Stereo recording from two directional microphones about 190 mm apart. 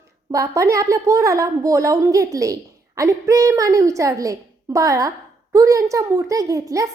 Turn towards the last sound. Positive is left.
turn(degrees=-15)  # may be behind; listen again after turning